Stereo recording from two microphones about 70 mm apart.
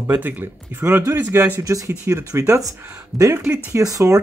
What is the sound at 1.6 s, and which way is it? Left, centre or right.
Speech, right.